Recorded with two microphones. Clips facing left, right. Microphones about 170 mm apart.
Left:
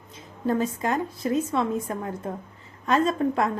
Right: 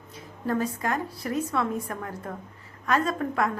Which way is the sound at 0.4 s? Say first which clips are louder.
Left 3 dB; 20° left (ahead or behind).